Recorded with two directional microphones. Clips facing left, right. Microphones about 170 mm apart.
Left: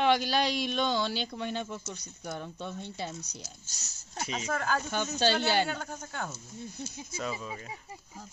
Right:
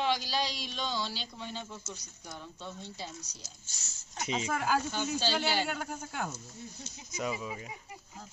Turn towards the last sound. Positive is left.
turn(degrees=-10)  # may be behind; listen again after turning